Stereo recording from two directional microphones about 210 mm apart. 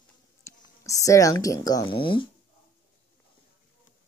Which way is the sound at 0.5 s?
15° left (ahead or behind).